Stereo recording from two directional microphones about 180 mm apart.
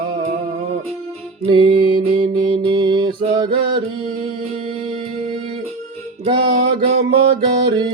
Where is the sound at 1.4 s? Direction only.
30° right (ahead or behind).